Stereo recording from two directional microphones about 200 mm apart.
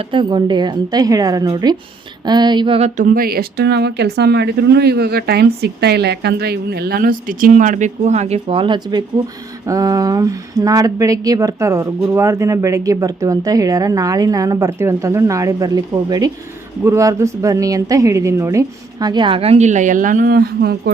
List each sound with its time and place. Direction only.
0.1 s a woman's voice: 25° right (ahead or behind)
3.1 s a woman's voice: 45° right (ahead or behind)